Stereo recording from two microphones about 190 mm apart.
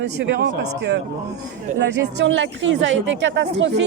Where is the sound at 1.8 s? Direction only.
75° right (ahead or behind).